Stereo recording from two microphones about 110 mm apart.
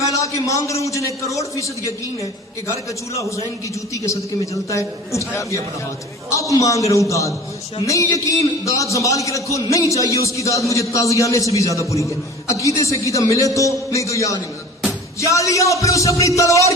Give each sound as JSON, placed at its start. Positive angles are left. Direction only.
{"t": 0.0, "sound": "a man's voice", "side_deg": 30}
{"t": 3.2, "sound": "a man's voice", "side_deg": 30}